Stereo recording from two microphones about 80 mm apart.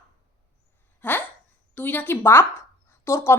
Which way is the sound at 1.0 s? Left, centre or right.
Left.